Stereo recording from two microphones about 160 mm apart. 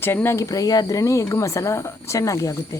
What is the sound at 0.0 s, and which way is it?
Speech, 15° left (ahead or behind).